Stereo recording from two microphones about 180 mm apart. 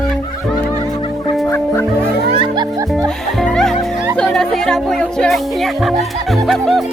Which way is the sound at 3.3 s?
Centre (ahead or behind).